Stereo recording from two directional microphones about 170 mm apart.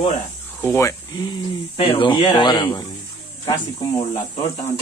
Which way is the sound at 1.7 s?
30° left (ahead or behind).